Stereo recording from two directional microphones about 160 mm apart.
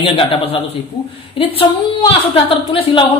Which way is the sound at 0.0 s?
35° left (ahead or behind).